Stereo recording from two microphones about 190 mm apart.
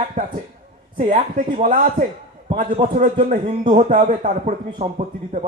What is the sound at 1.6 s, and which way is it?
Speech, 45° right (ahead or behind).